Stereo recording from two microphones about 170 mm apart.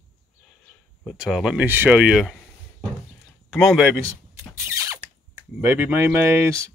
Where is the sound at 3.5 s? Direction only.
Centre (ahead or behind).